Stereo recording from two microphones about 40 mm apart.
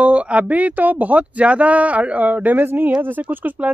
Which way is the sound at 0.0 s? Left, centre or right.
Right.